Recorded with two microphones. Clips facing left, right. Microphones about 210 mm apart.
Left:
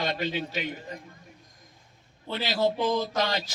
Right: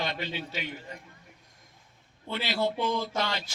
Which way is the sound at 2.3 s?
40° left (ahead or behind).